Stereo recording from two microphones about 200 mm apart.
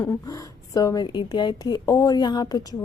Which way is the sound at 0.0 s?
15° left (ahead or behind).